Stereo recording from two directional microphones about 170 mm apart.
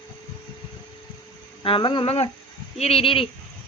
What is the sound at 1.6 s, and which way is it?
Speech, 30° left (ahead or behind).